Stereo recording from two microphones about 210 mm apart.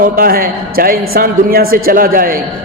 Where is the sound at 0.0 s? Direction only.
45° right (ahead or behind).